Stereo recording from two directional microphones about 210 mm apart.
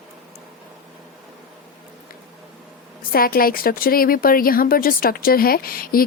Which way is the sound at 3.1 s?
45° left (ahead or behind).